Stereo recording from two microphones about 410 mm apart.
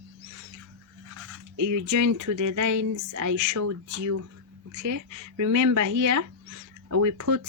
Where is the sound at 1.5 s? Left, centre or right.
Right.